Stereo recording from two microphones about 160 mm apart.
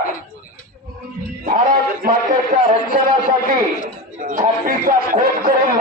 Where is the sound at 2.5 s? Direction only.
65° right (ahead or behind).